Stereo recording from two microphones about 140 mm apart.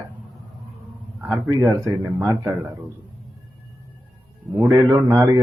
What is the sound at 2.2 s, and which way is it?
Speech, 25° right (ahead or behind).